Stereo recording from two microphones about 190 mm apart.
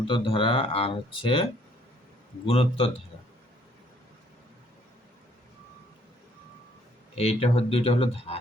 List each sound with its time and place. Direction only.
0.1 s speech: 25° left (ahead or behind)
2.5 s speech: 30° left (ahead or behind)
7.2 s speech: 30° left (ahead or behind)